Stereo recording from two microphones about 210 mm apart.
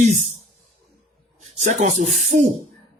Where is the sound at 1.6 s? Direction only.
35° right (ahead or behind).